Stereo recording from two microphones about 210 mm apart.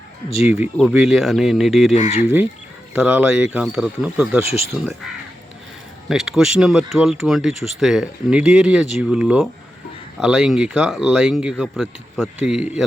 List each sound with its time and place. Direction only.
0.4 s speech: 5° right (ahead or behind)
1.9 s speech: 30° left (ahead or behind)
2.9 s speech: 5° right (ahead or behind)
6.1 s speech: centre (ahead or behind)